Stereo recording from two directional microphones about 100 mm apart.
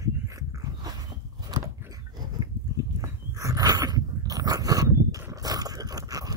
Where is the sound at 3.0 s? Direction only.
35° right (ahead or behind).